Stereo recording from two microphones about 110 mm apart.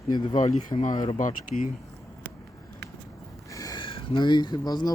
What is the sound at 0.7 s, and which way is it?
Speech, 45° left (ahead or behind).